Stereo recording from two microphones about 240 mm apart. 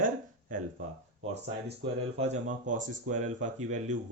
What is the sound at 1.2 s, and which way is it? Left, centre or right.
Speech, right.